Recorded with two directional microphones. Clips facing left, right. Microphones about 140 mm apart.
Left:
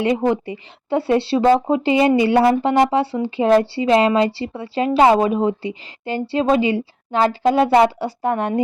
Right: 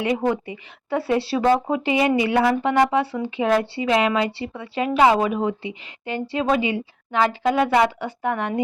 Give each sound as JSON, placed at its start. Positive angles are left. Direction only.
{"t": 0.3, "sound": "speech", "side_deg": 30}